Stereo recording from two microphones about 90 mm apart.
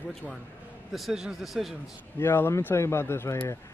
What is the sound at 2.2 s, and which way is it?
Speech, 30° left (ahead or behind).